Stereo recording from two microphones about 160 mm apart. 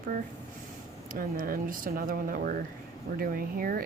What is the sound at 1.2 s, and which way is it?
Speech, 60° right (ahead or behind).